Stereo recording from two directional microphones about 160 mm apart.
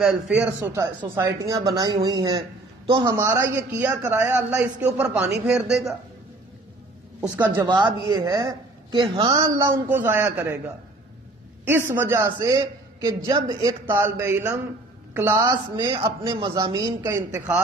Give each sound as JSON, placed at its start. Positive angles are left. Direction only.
{"t": 0.7, "sound": "a man's voice", "side_deg": -20}
{"t": 7.2, "sound": "a woman's voice", "side_deg": -10}
{"t": 7.5, "sound": "a man's voice", "side_deg": -30}
{"t": 11.6, "sound": "a man's voice", "side_deg": -15}